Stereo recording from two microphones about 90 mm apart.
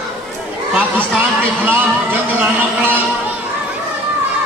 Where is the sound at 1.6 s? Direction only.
20° right (ahead or behind).